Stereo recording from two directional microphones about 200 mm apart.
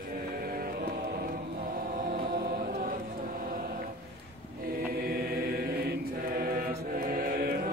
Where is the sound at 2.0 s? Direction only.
45° right (ahead or behind).